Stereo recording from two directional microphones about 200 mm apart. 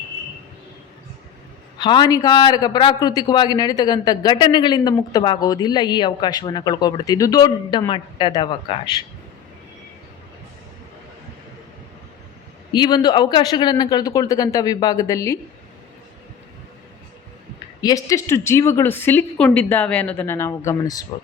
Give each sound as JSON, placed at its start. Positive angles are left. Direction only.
{"t": 1.8, "sound": "a man's voice", "side_deg": 20}
{"t": 12.7, "sound": "a man's voice", "side_deg": 20}
{"t": 17.7, "sound": "a woman's voice", "side_deg": 20}